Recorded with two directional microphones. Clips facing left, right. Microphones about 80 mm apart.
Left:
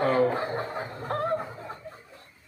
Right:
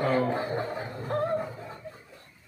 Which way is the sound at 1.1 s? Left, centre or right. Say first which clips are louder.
Right 1 dB; left.